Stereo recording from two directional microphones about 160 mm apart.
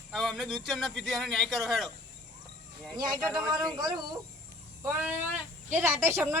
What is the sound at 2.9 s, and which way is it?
A man's voice, 25° right (ahead or behind).